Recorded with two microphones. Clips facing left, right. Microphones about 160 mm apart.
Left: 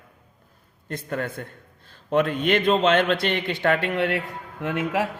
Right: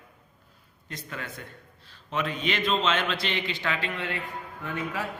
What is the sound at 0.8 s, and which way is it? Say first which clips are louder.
A man's voice: left 10 dB; 55° left (ahead or behind).